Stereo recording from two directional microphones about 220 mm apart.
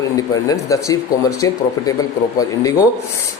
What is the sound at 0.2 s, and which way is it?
Speech, 15° left (ahead or behind).